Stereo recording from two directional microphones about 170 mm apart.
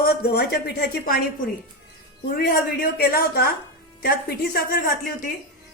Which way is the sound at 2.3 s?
60° left (ahead or behind).